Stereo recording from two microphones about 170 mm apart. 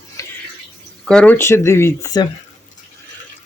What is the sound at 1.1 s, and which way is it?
Speech, 5° left (ahead or behind).